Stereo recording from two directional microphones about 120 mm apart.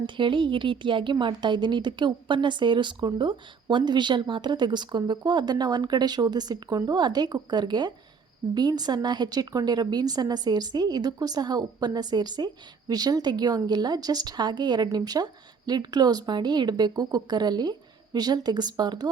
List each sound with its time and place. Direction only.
0.0 s a woman's voice: 45° right (ahead or behind)